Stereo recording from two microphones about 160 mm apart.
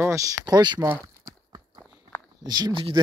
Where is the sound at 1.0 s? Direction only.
20° right (ahead or behind).